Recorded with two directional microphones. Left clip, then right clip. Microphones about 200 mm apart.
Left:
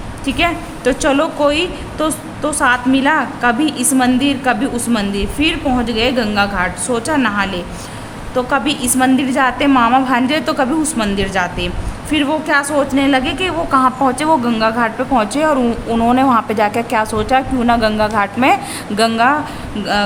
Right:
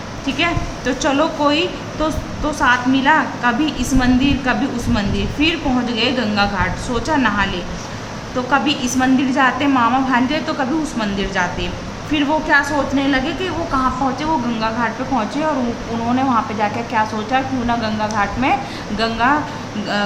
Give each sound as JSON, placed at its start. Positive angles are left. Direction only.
{"t": 0.3, "sound": "a woman's voice", "side_deg": 40}